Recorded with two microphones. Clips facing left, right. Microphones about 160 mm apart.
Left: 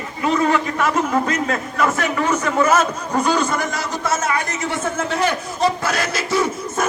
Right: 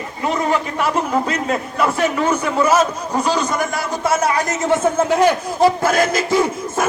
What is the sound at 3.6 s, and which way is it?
Speech, 25° right (ahead or behind).